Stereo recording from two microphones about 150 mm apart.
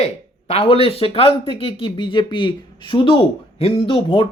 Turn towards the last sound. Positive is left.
turn(degrees=35)  # may be behind; listen again after turning